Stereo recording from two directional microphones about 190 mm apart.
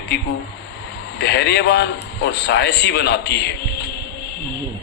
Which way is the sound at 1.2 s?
65° left (ahead or behind).